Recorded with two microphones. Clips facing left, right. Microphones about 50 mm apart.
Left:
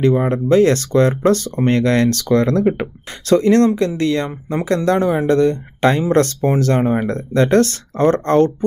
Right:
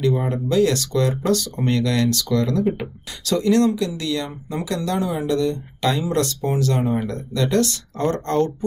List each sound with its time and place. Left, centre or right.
0.0 s speech: left